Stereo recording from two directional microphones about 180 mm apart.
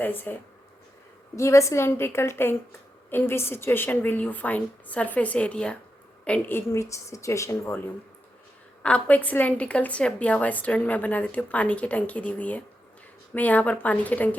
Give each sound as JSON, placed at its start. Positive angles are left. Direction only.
{"t": 0.0, "sound": "a woman's voice", "side_deg": 10}
{"t": 1.4, "sound": "a woman's voice", "side_deg": 15}